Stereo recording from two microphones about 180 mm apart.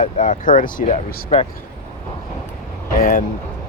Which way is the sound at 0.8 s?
30° left (ahead or behind).